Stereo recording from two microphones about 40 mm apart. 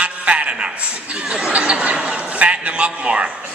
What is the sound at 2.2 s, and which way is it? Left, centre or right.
A man's voice, right.